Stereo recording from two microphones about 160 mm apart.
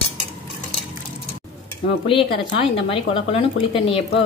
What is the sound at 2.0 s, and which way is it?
Speech, 35° left (ahead or behind).